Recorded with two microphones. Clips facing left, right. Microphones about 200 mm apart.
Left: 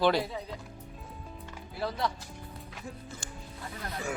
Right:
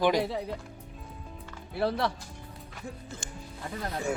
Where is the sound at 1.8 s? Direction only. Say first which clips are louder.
Right 6 dB; 65° right (ahead or behind).